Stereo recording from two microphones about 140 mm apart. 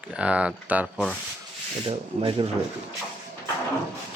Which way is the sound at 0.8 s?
5° left (ahead or behind).